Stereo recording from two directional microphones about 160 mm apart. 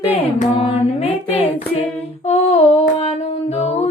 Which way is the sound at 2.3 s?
45° left (ahead or behind).